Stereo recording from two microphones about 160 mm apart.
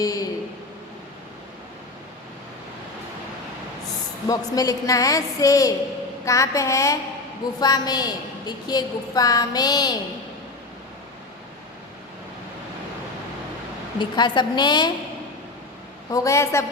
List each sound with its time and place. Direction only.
0.0 s speech: 20° left (ahead or behind)
4.3 s a woman's voice: 20° left (ahead or behind)
14.0 s a woman's voice: 30° left (ahead or behind)
16.1 s a woman's voice: 20° left (ahead or behind)